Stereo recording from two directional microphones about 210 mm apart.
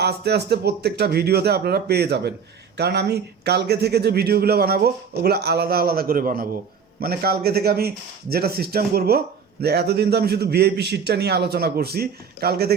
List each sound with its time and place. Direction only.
0.0 s speech: 50° right (ahead or behind)